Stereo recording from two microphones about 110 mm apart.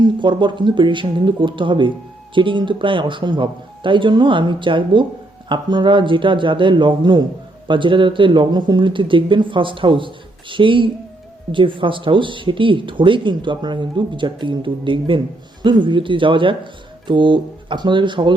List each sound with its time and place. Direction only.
0.0 s speech: 45° right (ahead or behind)